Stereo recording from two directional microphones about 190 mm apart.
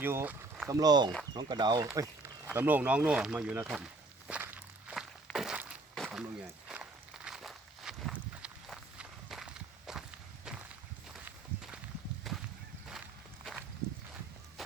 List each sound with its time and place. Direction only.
0.0 s speech: 10° right (ahead or behind)
2.0 s speech: 10° right (ahead or behind)
4.3 s walk: 10° right (ahead or behind)
11.3 s walk: 5° right (ahead or behind)
12.3 s a sound: centre (ahead or behind)